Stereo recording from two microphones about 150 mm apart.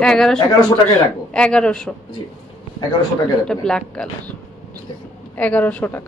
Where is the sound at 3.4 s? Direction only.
5° left (ahead or behind).